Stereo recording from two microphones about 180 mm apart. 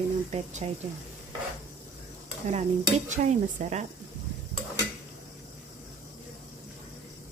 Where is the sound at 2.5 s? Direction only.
40° right (ahead or behind).